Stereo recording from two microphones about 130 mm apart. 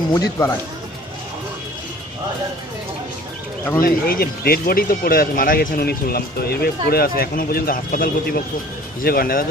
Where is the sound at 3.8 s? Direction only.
90° left.